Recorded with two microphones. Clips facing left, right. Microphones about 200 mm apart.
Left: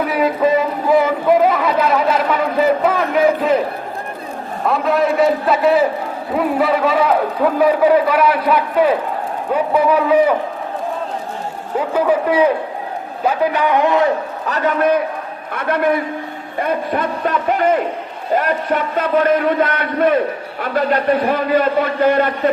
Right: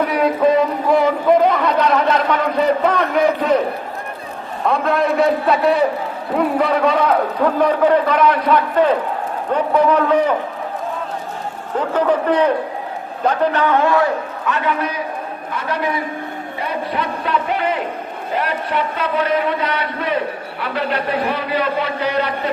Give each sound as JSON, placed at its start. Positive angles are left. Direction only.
{"t": 0.0, "sound": "music", "side_deg": 0}
{"t": 4.6, "sound": "a man's voice", "side_deg": 0}
{"t": 11.8, "sound": "a man's voice", "side_deg": 10}
{"t": 14.4, "sound": "a man's voice", "side_deg": 40}